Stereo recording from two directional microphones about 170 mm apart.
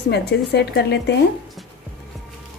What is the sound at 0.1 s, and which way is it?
A woman's voice, 80° left.